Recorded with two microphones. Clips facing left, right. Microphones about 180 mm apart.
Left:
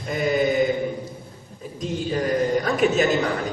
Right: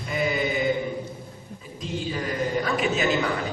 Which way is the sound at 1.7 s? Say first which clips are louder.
Left 5 dB; 45° left (ahead or behind).